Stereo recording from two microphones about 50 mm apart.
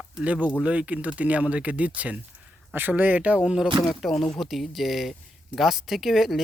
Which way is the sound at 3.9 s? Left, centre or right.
Centre.